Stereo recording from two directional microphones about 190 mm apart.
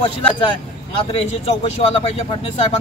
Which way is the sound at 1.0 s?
30° left (ahead or behind).